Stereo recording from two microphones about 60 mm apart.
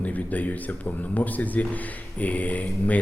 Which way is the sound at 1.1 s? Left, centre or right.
Left.